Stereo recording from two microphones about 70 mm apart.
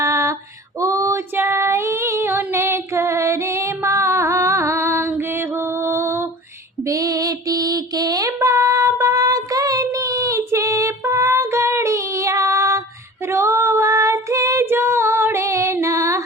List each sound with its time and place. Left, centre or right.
0.0 s female singing: right
1.1 s female singing: right
5.1 s music: right
6.8 s female singing: right